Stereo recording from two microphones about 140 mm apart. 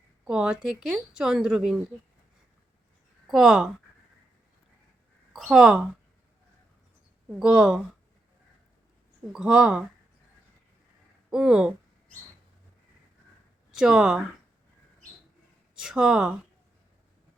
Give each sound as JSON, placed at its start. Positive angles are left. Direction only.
{"t": 0.3, "sound": "speech", "side_deg": -5}
{"t": 3.2, "sound": "speech", "side_deg": 0}
{"t": 5.3, "sound": "speech", "side_deg": -5}
{"t": 7.3, "sound": "speech", "side_deg": -5}
{"t": 9.3, "sound": "speech", "side_deg": -5}
{"t": 11.3, "sound": "speech", "side_deg": -5}
{"t": 13.7, "sound": "speech", "side_deg": -5}
{"t": 15.7, "sound": "speech", "side_deg": -5}